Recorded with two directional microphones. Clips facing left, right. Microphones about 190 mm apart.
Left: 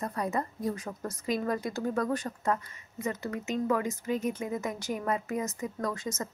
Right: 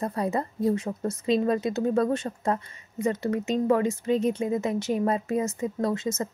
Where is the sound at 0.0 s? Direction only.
30° right (ahead or behind).